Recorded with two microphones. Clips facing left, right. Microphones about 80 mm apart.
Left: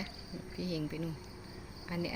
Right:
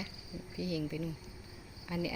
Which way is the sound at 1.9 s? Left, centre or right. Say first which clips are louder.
Right 1 dB; left.